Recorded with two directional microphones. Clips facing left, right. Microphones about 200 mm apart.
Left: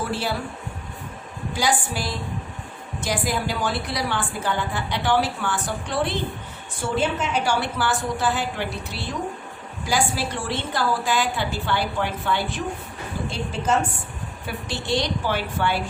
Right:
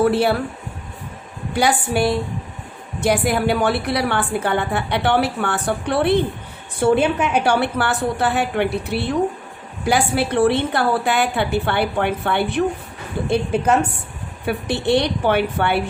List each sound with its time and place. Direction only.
0.0 s a woman's voice: 60° right (ahead or behind)
1.5 s a woman's voice: 60° right (ahead or behind)